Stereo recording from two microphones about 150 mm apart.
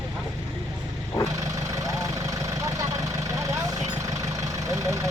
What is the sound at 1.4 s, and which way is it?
Vehicle, 20° right (ahead or behind).